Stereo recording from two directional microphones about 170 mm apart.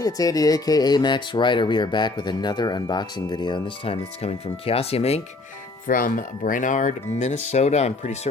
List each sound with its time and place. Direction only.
0.0 s speech: 20° left (ahead or behind); by 5.2 s 35° left (ahead or behind)
5.9 s speech: 50° left (ahead or behind)